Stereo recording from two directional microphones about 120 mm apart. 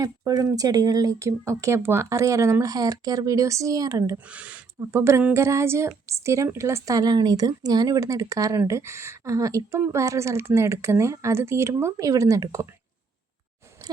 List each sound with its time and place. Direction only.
0.0 s a woman's voice: 30° right (ahead or behind)
4.3 s speech: 10° right (ahead or behind)
4.8 s a woman's voice: 25° right (ahead or behind)